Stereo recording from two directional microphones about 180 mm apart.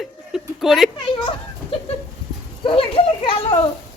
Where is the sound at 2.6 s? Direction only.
30° left (ahead or behind).